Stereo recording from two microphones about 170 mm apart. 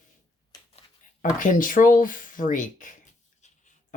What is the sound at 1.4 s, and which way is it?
Speech, 50° left (ahead or behind).